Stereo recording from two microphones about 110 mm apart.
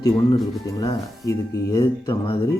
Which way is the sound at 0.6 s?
35° left (ahead or behind).